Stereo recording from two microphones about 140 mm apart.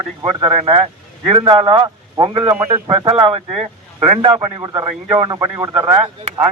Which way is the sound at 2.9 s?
40° right (ahead or behind).